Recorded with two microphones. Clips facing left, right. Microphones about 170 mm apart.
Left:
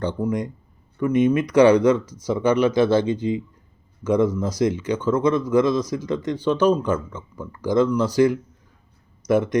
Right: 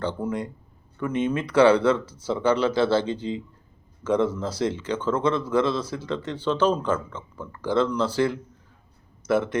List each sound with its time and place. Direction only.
0.0 s speech: 15° left (ahead or behind)